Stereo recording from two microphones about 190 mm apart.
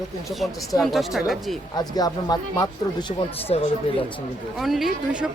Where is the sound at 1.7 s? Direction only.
20° left (ahead or behind).